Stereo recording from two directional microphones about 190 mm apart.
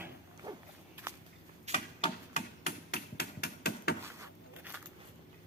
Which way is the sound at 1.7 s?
35° left (ahead or behind).